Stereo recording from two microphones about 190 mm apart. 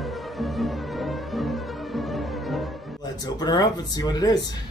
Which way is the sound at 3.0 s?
20° left (ahead or behind).